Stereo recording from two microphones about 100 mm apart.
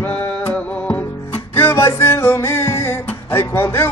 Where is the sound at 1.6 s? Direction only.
25° left (ahead or behind).